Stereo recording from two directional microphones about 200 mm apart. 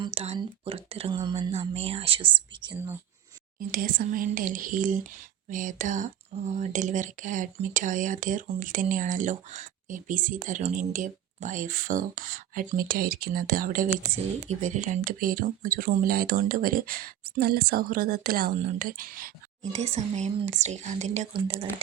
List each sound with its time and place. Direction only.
0.0 s speech: 30° right (ahead or behind)
3.7 s speech: 45° right (ahead or behind); by 21.7 s 25° right (ahead or behind)